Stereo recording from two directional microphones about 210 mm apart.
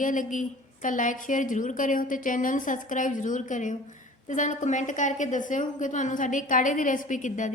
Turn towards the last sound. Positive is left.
turn(degrees=35)  # may be behind; listen again after turning